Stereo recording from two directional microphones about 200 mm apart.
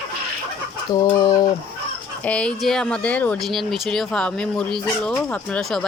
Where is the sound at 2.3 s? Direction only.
5° left (ahead or behind).